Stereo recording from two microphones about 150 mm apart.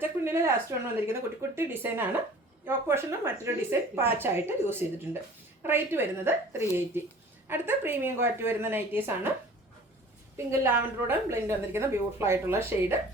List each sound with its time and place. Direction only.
0.0 s a sound: 15° right (ahead or behind)
1.0 s a woman's voice: 15° right (ahead or behind)
10.3 s a woman's voice: 15° right (ahead or behind)